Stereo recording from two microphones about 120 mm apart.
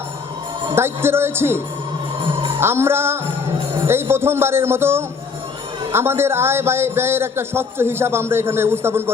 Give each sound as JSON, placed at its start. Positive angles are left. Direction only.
{"t": 0.8, "sound": "speech", "side_deg": -20}